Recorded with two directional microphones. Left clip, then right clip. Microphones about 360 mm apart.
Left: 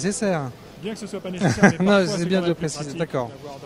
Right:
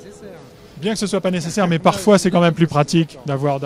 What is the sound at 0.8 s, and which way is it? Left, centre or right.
Speech, right.